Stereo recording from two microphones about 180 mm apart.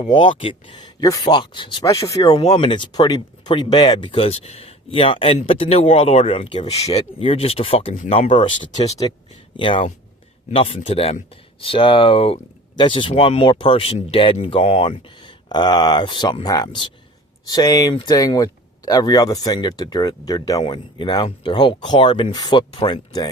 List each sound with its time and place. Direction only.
0.0 s speech: 25° left (ahead or behind)
2.3 s speech: 35° left (ahead or behind)
8.8 s speech: 20° left (ahead or behind)
10.5 s speech: 30° left (ahead or behind)